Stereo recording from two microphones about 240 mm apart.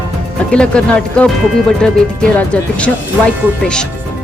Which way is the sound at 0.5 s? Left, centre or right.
Centre.